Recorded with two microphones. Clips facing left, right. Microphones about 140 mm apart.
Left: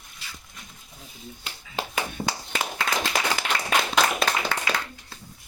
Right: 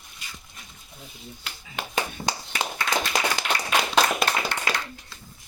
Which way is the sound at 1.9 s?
20° right (ahead or behind).